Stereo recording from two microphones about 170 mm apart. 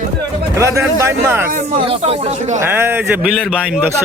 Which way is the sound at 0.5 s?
15° right (ahead or behind).